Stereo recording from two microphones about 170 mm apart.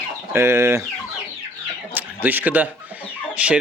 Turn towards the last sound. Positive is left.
turn(degrees=-5)  # may be behind; listen again after turning